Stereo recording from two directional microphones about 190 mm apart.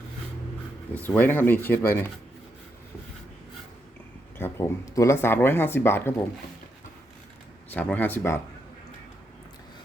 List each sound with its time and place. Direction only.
0.9 s speech: 10° left (ahead or behind)
4.4 s speech: 10° left (ahead or behind)
7.7 s speech: 10° left (ahead or behind)